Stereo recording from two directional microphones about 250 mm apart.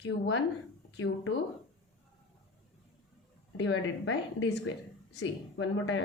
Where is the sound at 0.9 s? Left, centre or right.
Left.